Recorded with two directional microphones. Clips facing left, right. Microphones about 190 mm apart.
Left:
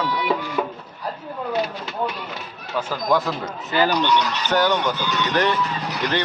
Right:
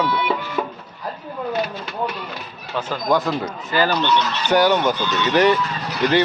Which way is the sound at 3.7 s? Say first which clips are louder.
Even; 15° left (ahead or behind).